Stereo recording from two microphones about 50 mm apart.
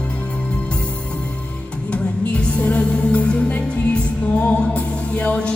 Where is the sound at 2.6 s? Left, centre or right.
Left.